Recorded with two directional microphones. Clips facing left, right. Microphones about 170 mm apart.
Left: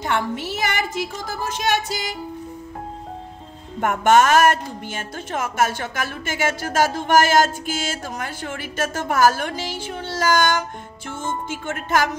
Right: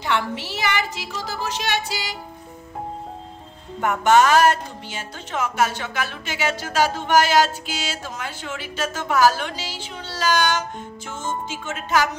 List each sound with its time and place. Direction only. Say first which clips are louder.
0.0 s a woman's voice: left 1 dB; 50° left (ahead or behind)
3.8 s a woman's voice: left 1 dB; 50° left (ahead or behind)